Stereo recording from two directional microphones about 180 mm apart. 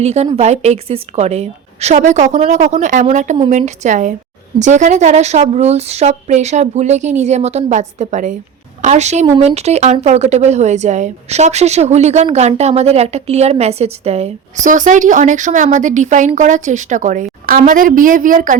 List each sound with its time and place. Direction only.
0.0 s a woman's voice: 35° right (ahead or behind)